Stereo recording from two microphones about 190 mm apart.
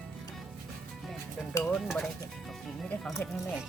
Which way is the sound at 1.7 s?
Centre (ahead or behind).